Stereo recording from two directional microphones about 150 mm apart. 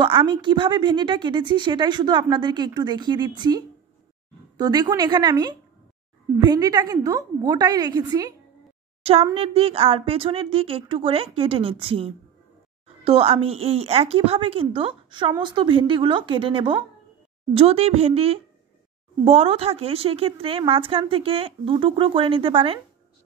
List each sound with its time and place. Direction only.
0.0 s a woman's voice: 35° right (ahead or behind)
9.0 s a woman's voice: 40° right (ahead or behind)